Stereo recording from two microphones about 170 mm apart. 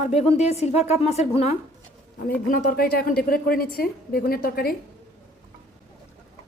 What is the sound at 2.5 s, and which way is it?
Speech, 60° left (ahead or behind).